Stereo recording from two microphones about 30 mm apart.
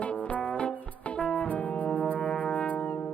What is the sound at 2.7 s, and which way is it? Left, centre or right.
Brass instrument, left.